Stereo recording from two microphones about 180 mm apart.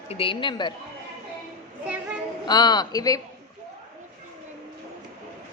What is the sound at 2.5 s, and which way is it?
Speech, 25° left (ahead or behind).